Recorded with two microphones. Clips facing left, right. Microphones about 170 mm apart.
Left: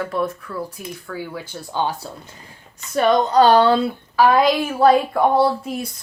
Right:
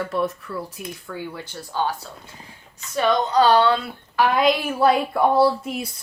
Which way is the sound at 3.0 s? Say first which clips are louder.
Left 4 dB; 50° left (ahead or behind).